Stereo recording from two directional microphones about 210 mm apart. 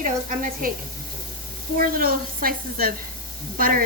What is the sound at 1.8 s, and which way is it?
A woman's voice, 45° right (ahead or behind).